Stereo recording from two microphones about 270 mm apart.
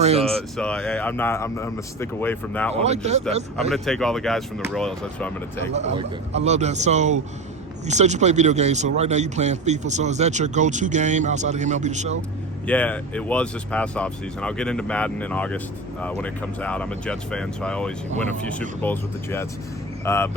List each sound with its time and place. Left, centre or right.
0.0 s a man's voice: right
0.3 s speech: centre
2.7 s a man's voice: right
3.7 s speech: centre
5.7 s a man's voice: right
12.6 s speech: centre